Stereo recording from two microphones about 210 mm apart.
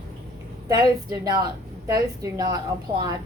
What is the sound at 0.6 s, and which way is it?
A woman's voice, 20° right (ahead or behind).